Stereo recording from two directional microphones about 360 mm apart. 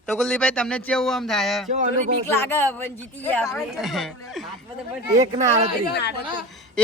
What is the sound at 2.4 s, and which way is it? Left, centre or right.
Speech, centre.